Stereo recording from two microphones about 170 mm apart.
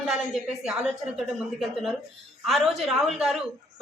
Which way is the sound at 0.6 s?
5° right (ahead or behind).